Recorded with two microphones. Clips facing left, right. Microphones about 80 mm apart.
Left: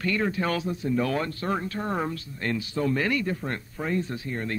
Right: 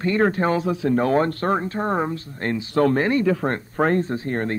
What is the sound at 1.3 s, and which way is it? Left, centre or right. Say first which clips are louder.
Speech: right 7 dB; right.